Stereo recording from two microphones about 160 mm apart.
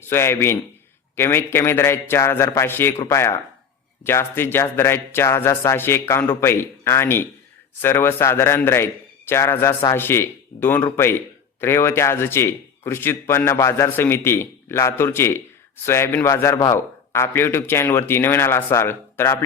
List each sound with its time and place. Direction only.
0.0 s a man's voice: 15° left (ahead or behind)